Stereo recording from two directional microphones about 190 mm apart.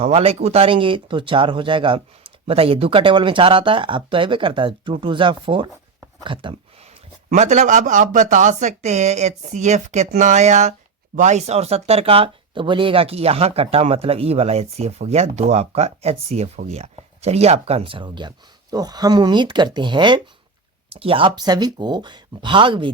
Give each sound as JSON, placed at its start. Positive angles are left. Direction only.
{"t": 0.0, "sound": "speech", "side_deg": -30}
{"t": 7.3, "sound": "speech", "side_deg": -40}